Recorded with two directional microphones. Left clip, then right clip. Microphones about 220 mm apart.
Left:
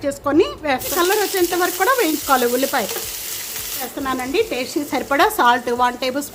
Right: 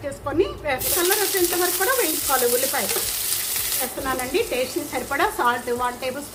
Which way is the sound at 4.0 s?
45° left (ahead or behind).